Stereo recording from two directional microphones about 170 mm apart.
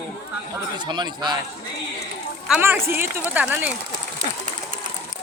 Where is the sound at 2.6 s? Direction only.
15° right (ahead or behind).